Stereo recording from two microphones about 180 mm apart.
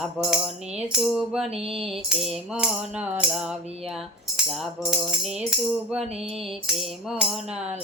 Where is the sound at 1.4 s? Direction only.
35° right (ahead or behind).